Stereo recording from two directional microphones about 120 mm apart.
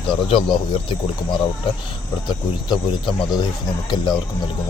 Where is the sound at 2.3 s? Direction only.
40° left (ahead or behind).